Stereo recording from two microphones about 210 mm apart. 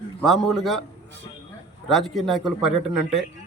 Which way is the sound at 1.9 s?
Centre (ahead or behind).